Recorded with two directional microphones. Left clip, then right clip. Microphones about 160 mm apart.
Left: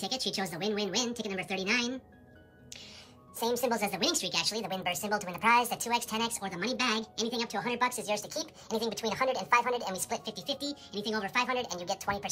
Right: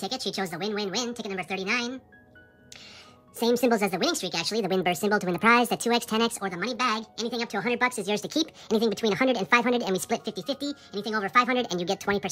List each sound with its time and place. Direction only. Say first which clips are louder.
0.0 s speech: right 3 dB; 10° right (ahead or behind)
3.3 s speech: right 7 dB; 30° right (ahead or behind)